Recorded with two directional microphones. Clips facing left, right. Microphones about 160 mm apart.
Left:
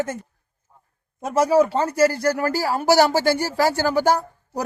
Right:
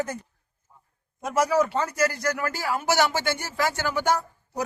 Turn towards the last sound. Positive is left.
turn(degrees=35)  # may be behind; listen again after turning